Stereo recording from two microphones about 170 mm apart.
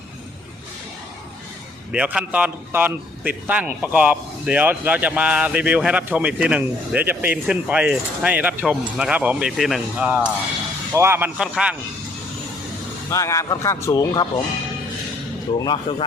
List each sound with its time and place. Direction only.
1.9 s a man's voice: 5° right (ahead or behind)
13.1 s speech: 15° left (ahead or behind)
15.5 s speech: 25° left (ahead or behind)